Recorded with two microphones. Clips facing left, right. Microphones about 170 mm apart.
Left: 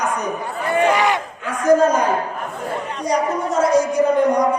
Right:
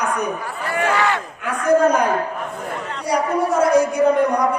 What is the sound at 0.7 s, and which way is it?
Speech, 15° left (ahead or behind).